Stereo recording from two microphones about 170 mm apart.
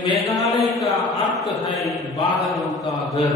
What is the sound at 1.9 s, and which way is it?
A man's voice, centre (ahead or behind).